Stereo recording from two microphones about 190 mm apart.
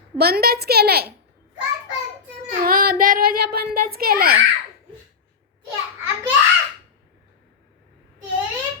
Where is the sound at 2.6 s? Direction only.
50° right (ahead or behind).